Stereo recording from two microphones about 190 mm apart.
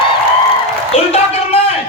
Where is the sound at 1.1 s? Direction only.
30° left (ahead or behind).